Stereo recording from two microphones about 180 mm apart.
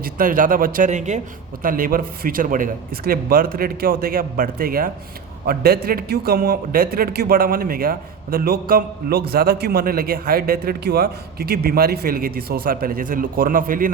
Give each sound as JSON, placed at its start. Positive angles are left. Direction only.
{"t": 0.0, "sound": "a man's voice", "side_deg": -50}